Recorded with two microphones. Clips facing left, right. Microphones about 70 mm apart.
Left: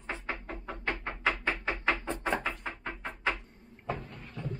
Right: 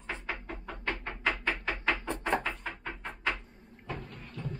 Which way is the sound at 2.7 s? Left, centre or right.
Centre.